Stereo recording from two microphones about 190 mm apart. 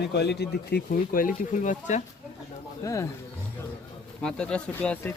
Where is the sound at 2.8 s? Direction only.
15° left (ahead or behind).